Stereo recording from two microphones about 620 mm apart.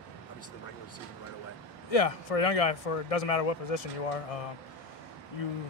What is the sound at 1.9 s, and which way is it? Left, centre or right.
Speech, left.